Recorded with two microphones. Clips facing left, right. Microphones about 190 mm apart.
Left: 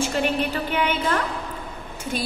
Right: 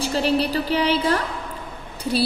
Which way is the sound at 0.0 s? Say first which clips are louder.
Right 2 dB; 35° right (ahead or behind).